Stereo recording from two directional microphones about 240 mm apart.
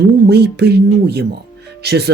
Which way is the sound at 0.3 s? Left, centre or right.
Right.